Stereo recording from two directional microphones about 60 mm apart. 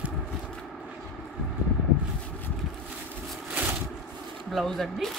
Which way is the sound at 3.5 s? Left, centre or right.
Right.